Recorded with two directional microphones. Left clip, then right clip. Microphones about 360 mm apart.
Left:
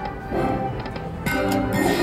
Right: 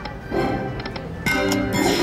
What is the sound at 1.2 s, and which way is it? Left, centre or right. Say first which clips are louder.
Music: right 2 dB; centre.